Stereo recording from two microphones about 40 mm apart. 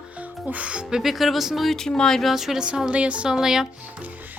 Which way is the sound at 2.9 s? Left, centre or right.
Right.